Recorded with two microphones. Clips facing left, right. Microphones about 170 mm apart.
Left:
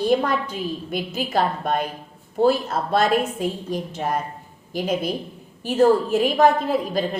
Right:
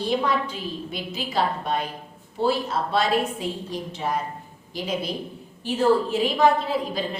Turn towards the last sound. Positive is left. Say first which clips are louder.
# left 4 dB
turn(degrees=45)  # may be behind; listen again after turning